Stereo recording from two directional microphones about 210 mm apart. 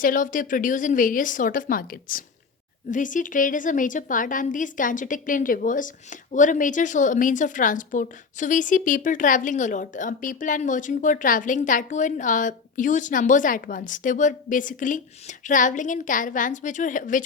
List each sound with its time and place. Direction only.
0.0 s a woman's voice: 40° left (ahead or behind)